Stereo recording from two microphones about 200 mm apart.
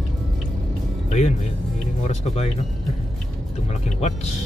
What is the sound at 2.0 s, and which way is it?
Speech, 30° left (ahead or behind).